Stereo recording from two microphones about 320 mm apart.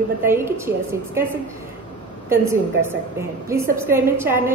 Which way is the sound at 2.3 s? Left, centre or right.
Centre.